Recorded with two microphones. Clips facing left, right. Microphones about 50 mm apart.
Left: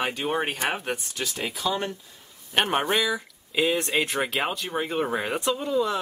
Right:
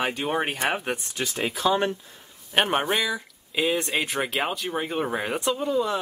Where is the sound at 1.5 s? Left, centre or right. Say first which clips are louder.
Right 6 dB; right.